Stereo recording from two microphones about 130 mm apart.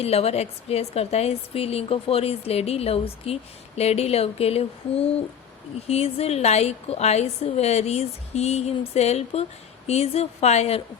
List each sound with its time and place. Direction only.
0.0 s a woman's voice: 50° left (ahead or behind)